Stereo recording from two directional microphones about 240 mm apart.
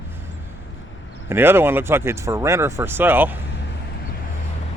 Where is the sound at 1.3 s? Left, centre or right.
Centre.